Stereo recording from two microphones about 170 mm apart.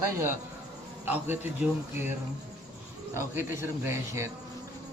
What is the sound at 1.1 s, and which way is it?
Speech, 10° right (ahead or behind).